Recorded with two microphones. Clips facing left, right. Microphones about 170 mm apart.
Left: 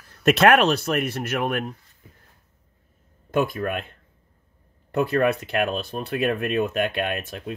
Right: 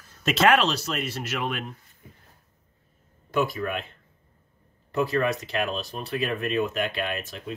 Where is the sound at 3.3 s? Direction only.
55° left (ahead or behind).